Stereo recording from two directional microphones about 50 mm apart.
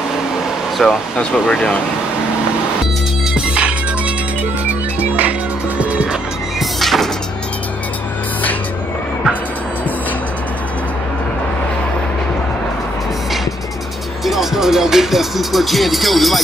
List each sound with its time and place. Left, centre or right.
0.8 s music: centre
1.5 s speech: left
3.3 s music: right
5.8 s music: right
6.8 s music: centre
14.2 s music: centre